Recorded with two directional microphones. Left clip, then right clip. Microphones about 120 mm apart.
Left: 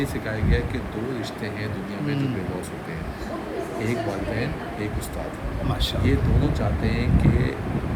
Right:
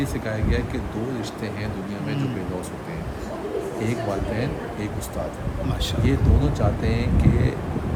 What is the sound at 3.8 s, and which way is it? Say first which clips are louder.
Speech: left 1 dB; 35° right (ahead or behind).